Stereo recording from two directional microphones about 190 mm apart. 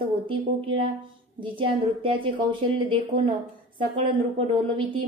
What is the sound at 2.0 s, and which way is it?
A woman's voice, 25° right (ahead or behind).